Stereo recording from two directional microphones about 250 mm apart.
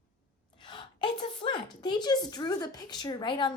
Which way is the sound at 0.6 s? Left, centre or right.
Centre.